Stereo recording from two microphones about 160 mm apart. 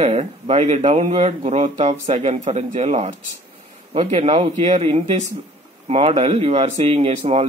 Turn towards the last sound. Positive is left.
turn(degrees=-40)  # may be behind; listen again after turning